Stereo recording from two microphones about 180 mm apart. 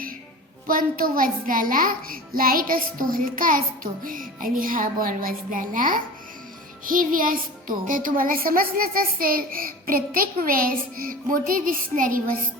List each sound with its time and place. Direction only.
0.7 s a child's voice: 50° right (ahead or behind)